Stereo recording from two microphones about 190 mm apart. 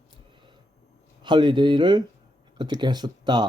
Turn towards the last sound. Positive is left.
turn(degrees=-20)  # may be behind; listen again after turning